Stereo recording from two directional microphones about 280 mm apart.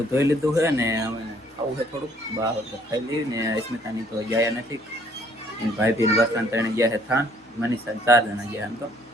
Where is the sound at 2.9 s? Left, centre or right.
Centre.